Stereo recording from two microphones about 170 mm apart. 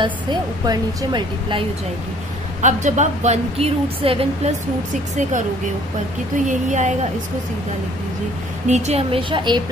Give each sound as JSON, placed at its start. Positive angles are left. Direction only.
{"t": 0.0, "sound": "a woman's voice", "side_deg": -25}
{"t": 2.6, "sound": "a woman's voice", "side_deg": -45}
{"t": 6.3, "sound": "speech", "side_deg": -50}
{"t": 8.6, "sound": "a woman's voice", "side_deg": -40}